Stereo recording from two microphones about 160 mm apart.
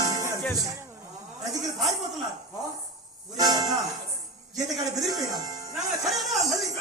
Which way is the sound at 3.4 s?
25° right (ahead or behind).